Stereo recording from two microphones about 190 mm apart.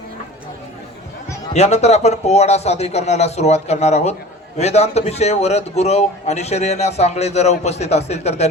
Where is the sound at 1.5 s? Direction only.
35° left (ahead or behind).